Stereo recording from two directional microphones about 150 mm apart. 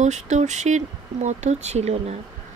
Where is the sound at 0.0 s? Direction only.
50° right (ahead or behind).